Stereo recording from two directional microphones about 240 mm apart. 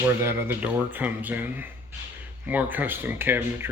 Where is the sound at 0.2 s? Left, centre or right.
Centre.